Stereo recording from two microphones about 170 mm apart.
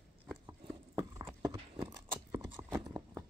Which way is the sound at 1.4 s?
15° right (ahead or behind).